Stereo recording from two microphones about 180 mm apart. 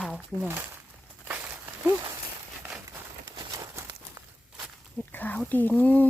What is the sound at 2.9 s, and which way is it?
Walk, 20° right (ahead or behind).